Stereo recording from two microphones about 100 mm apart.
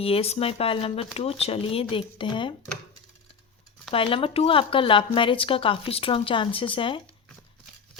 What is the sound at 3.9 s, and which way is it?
Speech, 65° left (ahead or behind).